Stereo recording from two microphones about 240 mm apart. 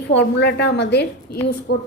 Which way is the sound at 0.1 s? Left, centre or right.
Left.